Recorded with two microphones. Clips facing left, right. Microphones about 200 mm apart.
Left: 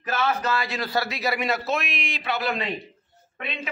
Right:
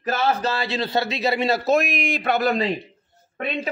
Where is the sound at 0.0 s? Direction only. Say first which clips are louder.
Right 3 dB; 35° right (ahead or behind).